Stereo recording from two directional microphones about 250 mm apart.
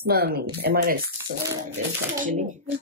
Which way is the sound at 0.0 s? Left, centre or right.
Right.